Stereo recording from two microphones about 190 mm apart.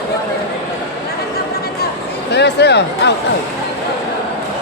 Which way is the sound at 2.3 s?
60° left (ahead or behind).